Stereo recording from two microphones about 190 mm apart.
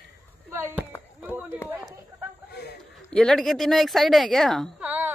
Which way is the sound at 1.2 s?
10° right (ahead or behind).